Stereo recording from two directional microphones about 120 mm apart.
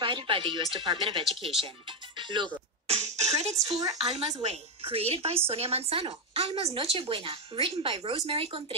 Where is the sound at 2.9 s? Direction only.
65° right (ahead or behind).